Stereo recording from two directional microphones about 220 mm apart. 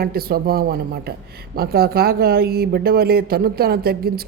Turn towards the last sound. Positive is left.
turn(degrees=-45)  # may be behind; listen again after turning